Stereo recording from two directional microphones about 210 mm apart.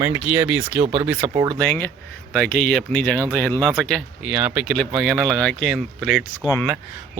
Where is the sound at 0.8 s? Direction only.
25° right (ahead or behind).